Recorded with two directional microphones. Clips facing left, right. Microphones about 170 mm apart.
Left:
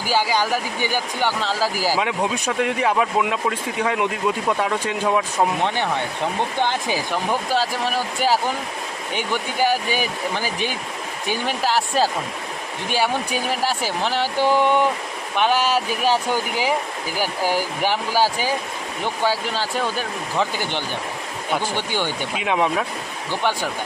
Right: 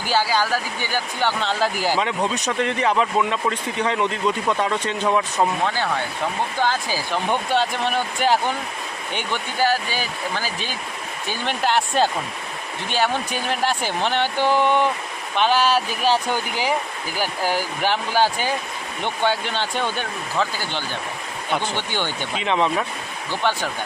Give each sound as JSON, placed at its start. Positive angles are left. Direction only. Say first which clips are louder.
{"t": 0.1, "sound": "speech", "louder": "even", "side_deg": 15}
{"t": 5.6, "sound": "speech", "louder": "left 1 dB", "side_deg": 20}
{"t": 7.3, "sound": "speech", "louder": "right 2 dB", "side_deg": 0}
{"t": 17.2, "sound": "speech", "louder": "left 1 dB", "side_deg": 10}
{"t": 20.4, "sound": "speech", "louder": "left 2 dB", "side_deg": 15}